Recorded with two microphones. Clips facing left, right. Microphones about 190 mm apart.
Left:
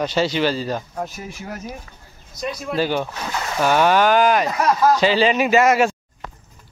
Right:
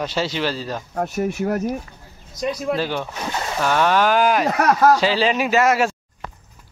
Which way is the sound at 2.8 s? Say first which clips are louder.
Left 3 dB; centre (ahead or behind).